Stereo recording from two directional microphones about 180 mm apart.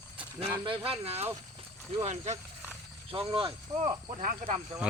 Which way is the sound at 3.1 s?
30° right (ahead or behind).